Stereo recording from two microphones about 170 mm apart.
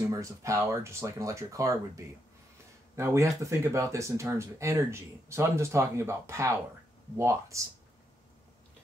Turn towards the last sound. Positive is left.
turn(degrees=-15)  # may be behind; listen again after turning